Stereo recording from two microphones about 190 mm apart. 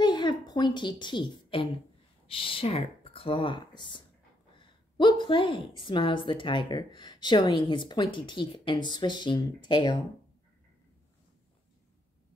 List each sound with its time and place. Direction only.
0.0 s a woman's voice: 25° left (ahead or behind)